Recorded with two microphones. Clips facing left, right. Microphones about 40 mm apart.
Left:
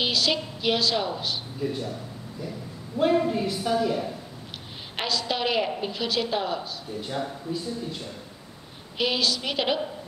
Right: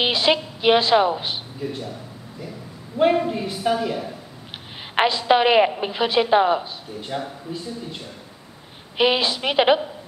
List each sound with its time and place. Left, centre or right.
0.0 s a woman's voice: right
1.6 s a woman's voice: centre
3.2 s a woman's voice: centre
8.9 s a woman's voice: right